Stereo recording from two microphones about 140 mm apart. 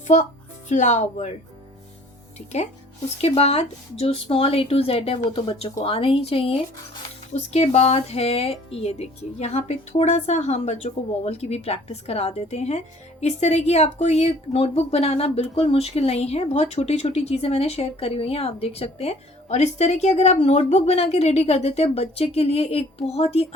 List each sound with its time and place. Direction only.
0.1 s speech: 55° left (ahead or behind)
3.2 s speech: 45° left (ahead or behind)